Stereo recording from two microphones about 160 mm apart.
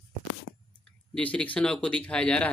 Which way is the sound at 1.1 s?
10° left (ahead or behind).